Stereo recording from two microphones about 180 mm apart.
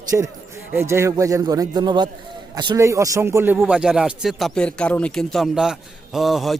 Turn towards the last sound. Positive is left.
turn(degrees=0)  # may be behind; listen again after turning